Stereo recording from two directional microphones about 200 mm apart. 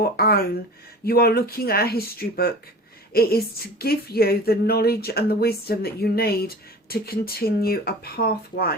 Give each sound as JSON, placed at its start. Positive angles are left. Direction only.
{"t": 0.0, "sound": "speech", "side_deg": 50}